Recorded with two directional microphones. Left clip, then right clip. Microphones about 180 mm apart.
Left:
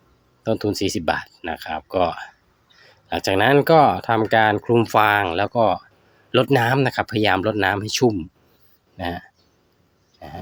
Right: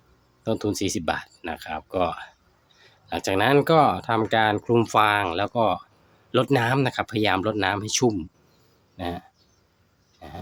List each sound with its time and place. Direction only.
0.4 s speech: 15° left (ahead or behind)
10.2 s pig: 15° left (ahead or behind)